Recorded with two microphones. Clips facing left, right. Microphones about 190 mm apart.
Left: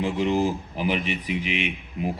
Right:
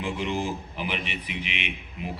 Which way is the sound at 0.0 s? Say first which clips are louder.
Left 6 dB; 35° left (ahead or behind).